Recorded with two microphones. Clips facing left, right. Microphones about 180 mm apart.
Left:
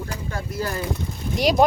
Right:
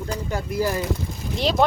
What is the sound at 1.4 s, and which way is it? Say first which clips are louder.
Speech: left 2 dB; 15° left (ahead or behind).